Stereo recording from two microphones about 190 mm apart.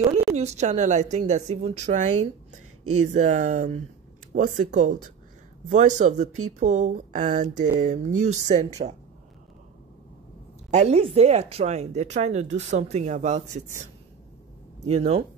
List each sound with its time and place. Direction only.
0.0 s a woman's voice: 35° right (ahead or behind)
10.7 s a woman's voice: 35° right (ahead or behind)
14.9 s a woman's voice: 35° right (ahead or behind)